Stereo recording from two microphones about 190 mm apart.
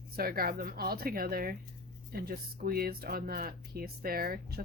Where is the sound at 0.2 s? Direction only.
50° right (ahead or behind).